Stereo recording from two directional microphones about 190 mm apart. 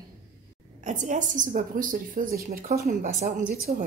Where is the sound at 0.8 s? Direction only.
40° right (ahead or behind).